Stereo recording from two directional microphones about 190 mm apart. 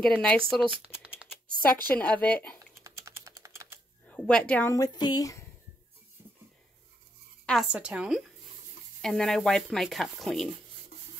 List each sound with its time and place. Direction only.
0.0 s speech: 5° left (ahead or behind)
1.6 s speech: 5° left (ahead or behind)
2.8 s typing: 15° right (ahead or behind)
4.0 s speech: 5° left (ahead or behind)
7.4 s speech: centre (ahead or behind)